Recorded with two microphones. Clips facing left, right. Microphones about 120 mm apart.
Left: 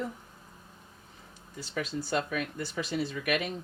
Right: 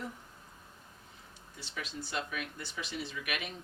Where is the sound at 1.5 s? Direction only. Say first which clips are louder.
Left 8 dB; 40° left (ahead or behind).